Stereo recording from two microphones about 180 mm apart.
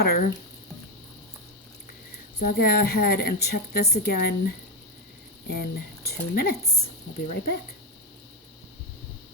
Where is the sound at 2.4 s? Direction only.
55° left (ahead or behind).